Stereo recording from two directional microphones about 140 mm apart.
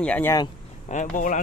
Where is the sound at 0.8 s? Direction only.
60° left (ahead or behind).